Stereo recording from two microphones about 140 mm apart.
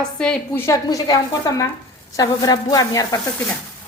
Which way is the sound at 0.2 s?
5° left (ahead or behind).